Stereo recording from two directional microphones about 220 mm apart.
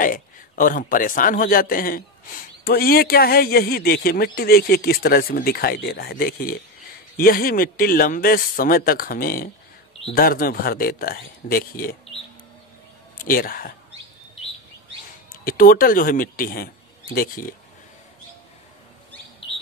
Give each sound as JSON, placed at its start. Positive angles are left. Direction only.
{"t": 0.0, "sound": "a man's voice", "side_deg": 40}
{"t": 13.3, "sound": "a man's voice", "side_deg": 40}
{"t": 15.4, "sound": "speech", "side_deg": 40}